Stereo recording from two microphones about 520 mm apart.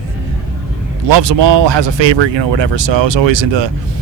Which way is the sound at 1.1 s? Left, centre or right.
Right.